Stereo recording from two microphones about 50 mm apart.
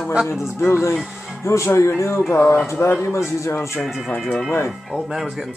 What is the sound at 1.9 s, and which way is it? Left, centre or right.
A man's voice, left.